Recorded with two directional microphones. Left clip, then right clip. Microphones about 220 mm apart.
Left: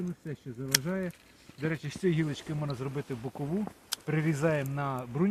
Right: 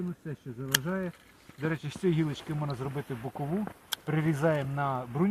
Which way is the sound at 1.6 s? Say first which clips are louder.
Even; 20° right (ahead or behind).